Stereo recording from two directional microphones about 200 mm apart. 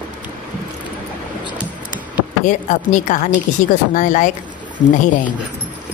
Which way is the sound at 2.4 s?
40° left (ahead or behind).